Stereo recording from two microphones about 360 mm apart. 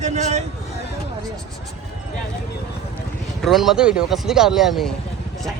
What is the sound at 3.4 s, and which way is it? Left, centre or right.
Speech, centre.